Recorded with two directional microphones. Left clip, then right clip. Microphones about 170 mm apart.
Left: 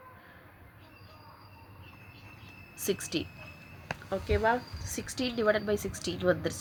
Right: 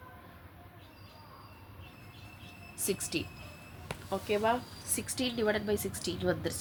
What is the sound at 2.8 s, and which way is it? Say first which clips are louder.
Speech: left 2 dB; 40° left (ahead or behind).